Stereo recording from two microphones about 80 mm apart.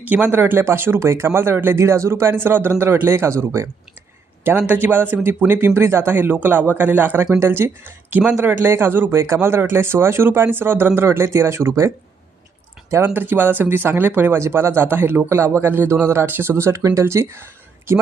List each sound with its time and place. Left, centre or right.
0.0 s speech: right
4.4 s speech: right
13.1 s speech: right